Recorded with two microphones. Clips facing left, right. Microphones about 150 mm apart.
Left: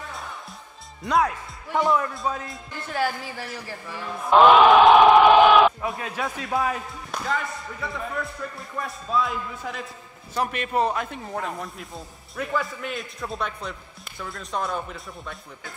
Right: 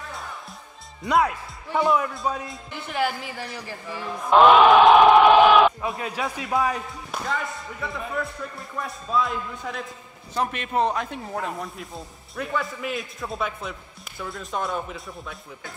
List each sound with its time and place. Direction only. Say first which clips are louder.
1.0 s speech: right 1 dB; 5° right (ahead or behind)
2.9 s a woman's voice: even; 15° right (ahead or behind)
4.3 s speech: even; centre (ahead or behind)
5.9 s a woman's voice: right 1 dB; 15° right (ahead or behind)
7.1 s speech: left 1 dB; centre (ahead or behind)